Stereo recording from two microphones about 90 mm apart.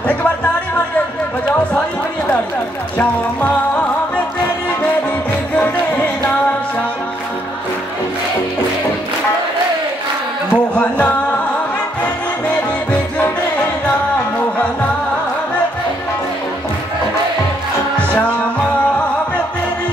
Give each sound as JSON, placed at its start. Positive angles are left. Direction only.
{"t": 3.0, "sound": "music", "side_deg": 20}
{"t": 10.5, "sound": "music", "side_deg": 15}
{"t": 13.2, "sound": "music", "side_deg": 20}